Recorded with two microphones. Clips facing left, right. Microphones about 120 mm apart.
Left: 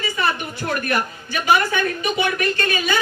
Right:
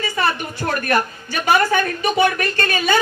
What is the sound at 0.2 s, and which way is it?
A woman's voice, 40° right (ahead or behind).